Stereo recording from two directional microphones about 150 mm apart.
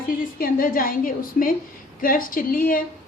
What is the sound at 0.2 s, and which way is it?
A woman's voice, 75° left (ahead or behind).